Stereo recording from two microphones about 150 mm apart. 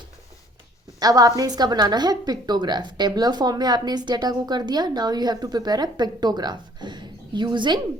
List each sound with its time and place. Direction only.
0.9 s a woman's voice: 25° right (ahead or behind)